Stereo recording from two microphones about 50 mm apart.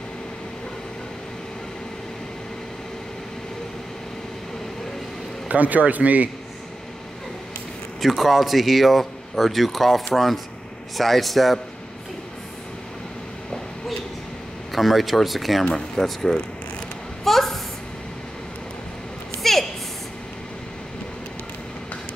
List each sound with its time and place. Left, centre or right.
5.5 s speech: right
8.0 s speech: centre
14.7 s speech: centre
17.2 s a sound: centre